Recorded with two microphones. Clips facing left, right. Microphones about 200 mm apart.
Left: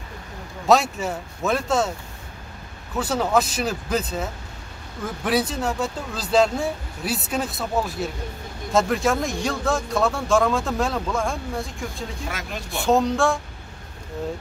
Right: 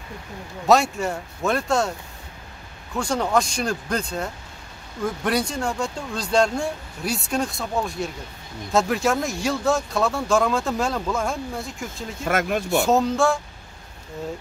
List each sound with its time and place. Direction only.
0.7 s speech: centre (ahead or behind)
3.0 s speech: 5° left (ahead or behind)
12.3 s speech: 55° right (ahead or behind)
12.8 s speech: centre (ahead or behind)